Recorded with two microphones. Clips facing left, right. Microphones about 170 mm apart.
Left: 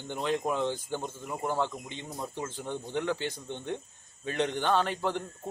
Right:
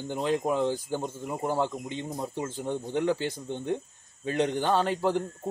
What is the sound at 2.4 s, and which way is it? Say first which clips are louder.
A man's voice: right 4 dB; 10° right (ahead or behind).